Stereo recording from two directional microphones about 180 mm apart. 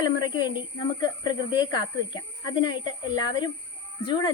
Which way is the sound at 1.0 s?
25° left (ahead or behind).